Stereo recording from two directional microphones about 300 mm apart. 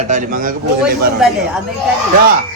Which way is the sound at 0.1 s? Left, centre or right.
Right.